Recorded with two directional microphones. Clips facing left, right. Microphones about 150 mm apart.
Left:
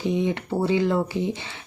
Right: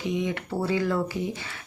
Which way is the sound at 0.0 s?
30° left (ahead or behind).